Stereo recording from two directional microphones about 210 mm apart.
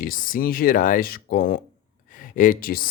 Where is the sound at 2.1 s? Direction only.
40° left (ahead or behind).